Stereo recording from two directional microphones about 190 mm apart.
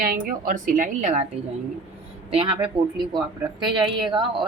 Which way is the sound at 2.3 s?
25° right (ahead or behind).